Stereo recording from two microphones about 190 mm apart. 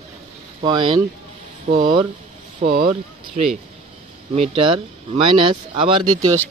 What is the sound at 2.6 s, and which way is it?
Speech, 40° right (ahead or behind).